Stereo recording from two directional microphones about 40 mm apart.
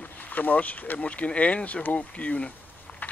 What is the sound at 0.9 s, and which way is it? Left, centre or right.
Speech, left.